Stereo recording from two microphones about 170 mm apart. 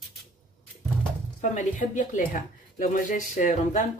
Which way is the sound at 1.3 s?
45° left (ahead or behind).